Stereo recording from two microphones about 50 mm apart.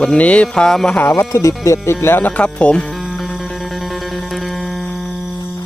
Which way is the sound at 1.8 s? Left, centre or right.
Left.